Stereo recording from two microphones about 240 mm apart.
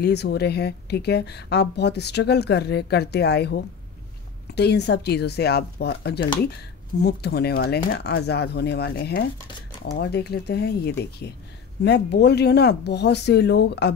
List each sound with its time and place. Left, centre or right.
0.0 s speech: left